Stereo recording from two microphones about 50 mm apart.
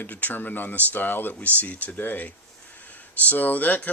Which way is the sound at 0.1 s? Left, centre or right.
Left.